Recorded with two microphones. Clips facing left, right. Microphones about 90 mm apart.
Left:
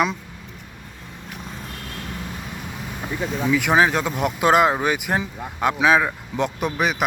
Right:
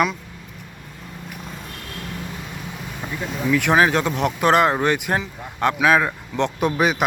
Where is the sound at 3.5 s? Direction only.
5° left (ahead or behind).